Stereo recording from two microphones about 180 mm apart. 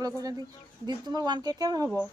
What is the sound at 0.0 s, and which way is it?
Speech, 20° right (ahead or behind).